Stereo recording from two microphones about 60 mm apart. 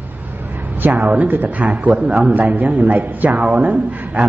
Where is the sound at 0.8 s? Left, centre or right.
Right.